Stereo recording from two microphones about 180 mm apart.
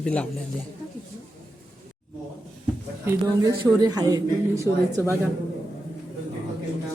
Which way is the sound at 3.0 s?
15° right (ahead or behind).